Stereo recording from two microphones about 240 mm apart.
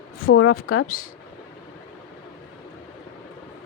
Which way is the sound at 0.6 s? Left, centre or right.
Left.